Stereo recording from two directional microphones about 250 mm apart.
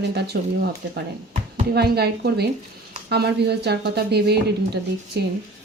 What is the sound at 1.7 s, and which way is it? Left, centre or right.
Speech, right.